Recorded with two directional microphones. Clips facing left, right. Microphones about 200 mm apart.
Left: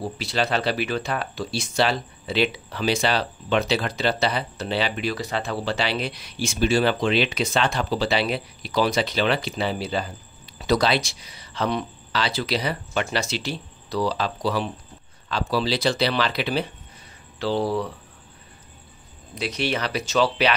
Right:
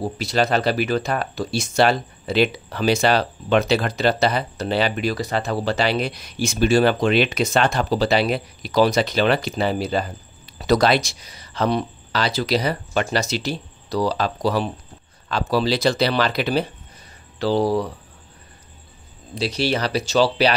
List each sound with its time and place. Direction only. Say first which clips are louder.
0.2 s speech: right 4 dB; 45° right (ahead or behind)
19.3 s speech: right 4 dB; 30° right (ahead or behind)